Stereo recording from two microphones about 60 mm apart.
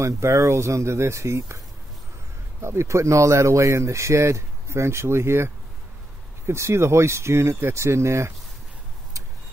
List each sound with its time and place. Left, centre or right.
0.0 s speech: right
2.6 s speech: right